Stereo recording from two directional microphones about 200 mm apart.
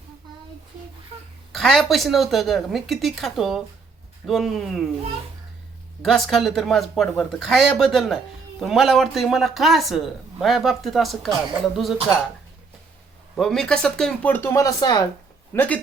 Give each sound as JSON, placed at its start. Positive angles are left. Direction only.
{"t": 1.5, "sound": "speech", "side_deg": 0}
{"t": 6.0, "sound": "speech", "side_deg": 0}
{"t": 13.3, "sound": "speech", "side_deg": 0}
{"t": 15.5, "sound": "speech", "side_deg": 10}